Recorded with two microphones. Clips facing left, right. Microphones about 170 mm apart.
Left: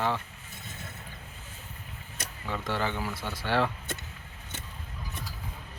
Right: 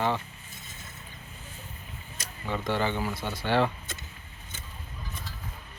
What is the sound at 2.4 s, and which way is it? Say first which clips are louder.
Speech: right 3 dB; 5° left (ahead or behind).